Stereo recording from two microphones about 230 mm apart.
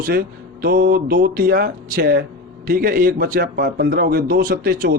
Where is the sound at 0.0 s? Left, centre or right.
Right.